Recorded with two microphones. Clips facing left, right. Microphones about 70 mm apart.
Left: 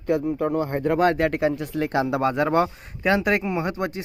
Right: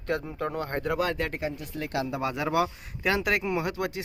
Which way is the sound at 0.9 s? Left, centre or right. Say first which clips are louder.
Left 9 dB; left.